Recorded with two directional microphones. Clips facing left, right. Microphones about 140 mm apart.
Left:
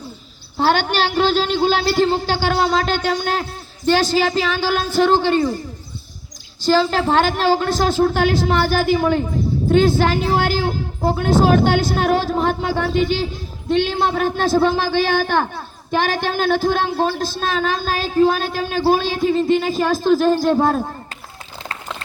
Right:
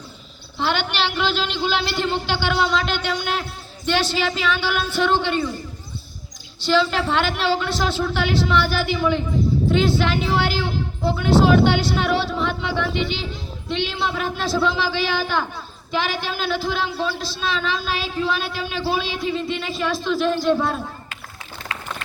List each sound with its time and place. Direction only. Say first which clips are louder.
0.5 s a man's voice: left 6 dB; 45° left (ahead or behind)
6.6 s a man's voice: left 3 dB; 40° left (ahead or behind)